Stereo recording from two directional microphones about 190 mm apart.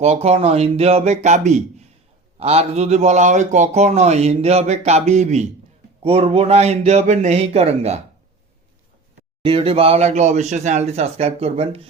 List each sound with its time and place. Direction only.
0.0 s a man's voice: 35° right (ahead or behind)
9.4 s a man's voice: 30° right (ahead or behind)